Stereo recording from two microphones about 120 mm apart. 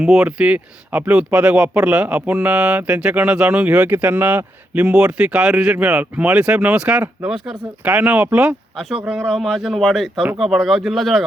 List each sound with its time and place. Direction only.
0.0 s speech: 5° right (ahead or behind)